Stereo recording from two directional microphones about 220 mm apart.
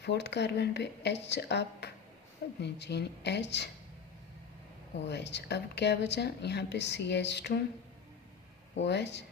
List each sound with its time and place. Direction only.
0.0 s speech: 50° left (ahead or behind)
5.0 s speech: 50° left (ahead or behind)
8.7 s speech: 50° left (ahead or behind)